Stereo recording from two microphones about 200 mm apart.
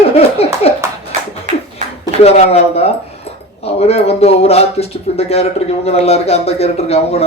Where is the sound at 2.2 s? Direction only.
30° left (ahead or behind).